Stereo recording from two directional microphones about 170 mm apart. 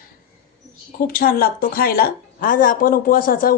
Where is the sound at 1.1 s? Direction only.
60° left (ahead or behind).